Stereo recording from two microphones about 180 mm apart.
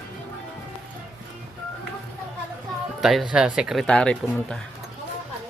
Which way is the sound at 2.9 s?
Centre (ahead or behind).